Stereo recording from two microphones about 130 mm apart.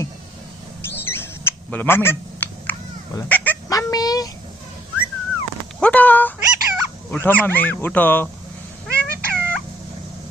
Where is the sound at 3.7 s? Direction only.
30° left (ahead or behind).